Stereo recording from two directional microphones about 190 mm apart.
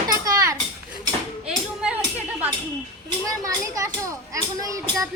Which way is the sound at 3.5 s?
15° right (ahead or behind).